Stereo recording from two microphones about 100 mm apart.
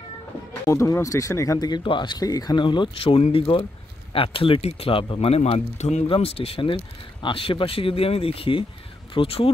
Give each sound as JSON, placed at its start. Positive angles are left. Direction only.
{"t": 0.7, "sound": "speech", "side_deg": 30}
{"t": 5.2, "sound": "speech", "side_deg": 90}
{"t": 6.0, "sound": "speech", "side_deg": 70}